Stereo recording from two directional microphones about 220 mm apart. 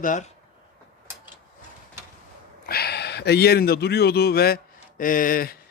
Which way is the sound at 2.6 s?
45° left (ahead or behind).